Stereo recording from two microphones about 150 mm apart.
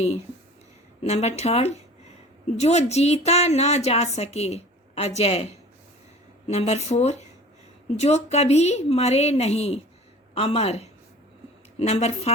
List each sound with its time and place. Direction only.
1.0 s a woman's voice: 45° left (ahead or behind)